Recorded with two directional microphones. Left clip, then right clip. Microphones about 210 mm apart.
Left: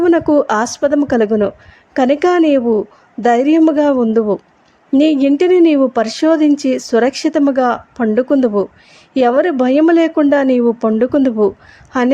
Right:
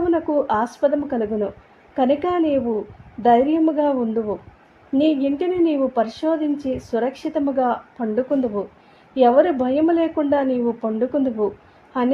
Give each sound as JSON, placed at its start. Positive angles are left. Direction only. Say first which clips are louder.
{"t": 0.0, "sound": "a woman's voice", "louder": "left 8 dB", "side_deg": 30}